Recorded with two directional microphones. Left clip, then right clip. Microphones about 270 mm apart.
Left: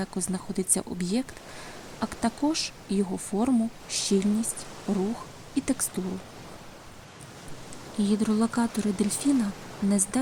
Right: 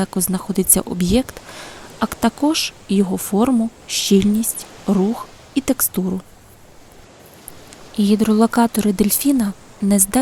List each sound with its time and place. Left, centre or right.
0.0 s speech: right
7.9 s speech: right